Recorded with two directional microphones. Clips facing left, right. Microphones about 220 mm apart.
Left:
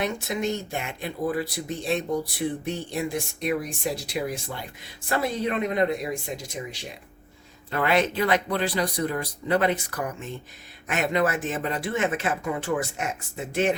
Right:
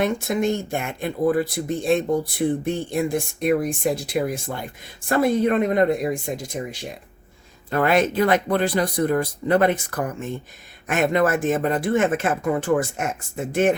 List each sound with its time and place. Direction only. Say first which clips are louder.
0.0 s speech: right 6 dB; 50° right (ahead or behind)